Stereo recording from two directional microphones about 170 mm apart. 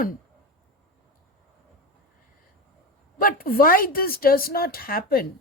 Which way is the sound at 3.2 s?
60° left (ahead or behind).